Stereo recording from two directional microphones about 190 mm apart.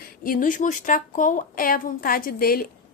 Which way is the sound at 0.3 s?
45° left (ahead or behind).